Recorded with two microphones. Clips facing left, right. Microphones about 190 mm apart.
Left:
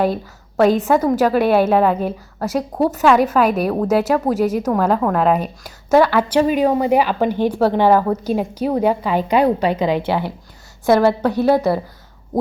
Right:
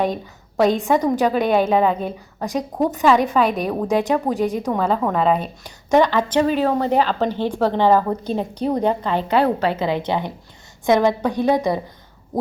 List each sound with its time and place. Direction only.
0.0 s a woman's voice: 5° left (ahead or behind)
10.8 s a woman's voice: 15° right (ahead or behind)